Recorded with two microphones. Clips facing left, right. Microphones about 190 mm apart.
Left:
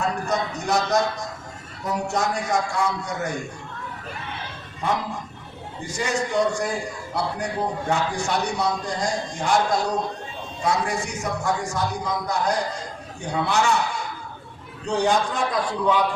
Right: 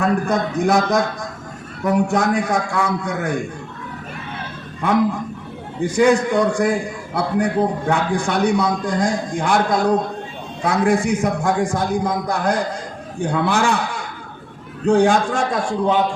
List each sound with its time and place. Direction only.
0.0 s a man's voice: 55° right (ahead or behind)
5.8 s a man's voice: 55° right (ahead or behind)